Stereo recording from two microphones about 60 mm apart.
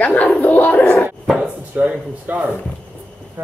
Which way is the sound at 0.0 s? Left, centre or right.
Left.